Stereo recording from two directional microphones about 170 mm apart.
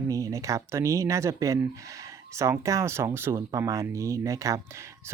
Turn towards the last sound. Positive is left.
turn(degrees=-20)  # may be behind; listen again after turning